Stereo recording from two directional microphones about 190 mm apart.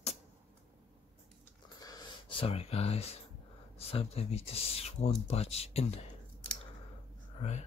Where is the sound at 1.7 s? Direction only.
20° left (ahead or behind).